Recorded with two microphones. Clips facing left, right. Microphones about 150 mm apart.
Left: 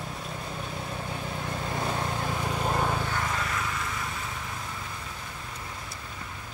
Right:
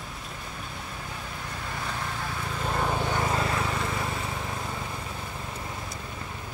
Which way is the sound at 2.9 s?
25° right (ahead or behind).